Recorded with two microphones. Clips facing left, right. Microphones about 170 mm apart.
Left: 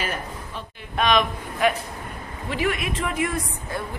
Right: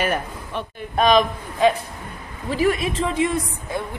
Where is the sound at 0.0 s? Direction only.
65° right (ahead or behind).